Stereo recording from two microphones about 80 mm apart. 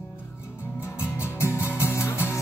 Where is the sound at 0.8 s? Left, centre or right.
Left.